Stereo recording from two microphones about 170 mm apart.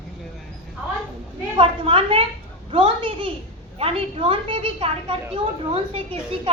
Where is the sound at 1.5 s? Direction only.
30° right (ahead or behind).